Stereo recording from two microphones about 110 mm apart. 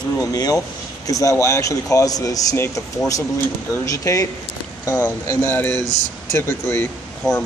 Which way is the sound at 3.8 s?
30° left (ahead or behind).